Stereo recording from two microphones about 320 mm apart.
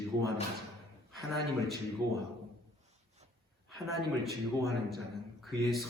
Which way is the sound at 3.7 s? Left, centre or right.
Centre.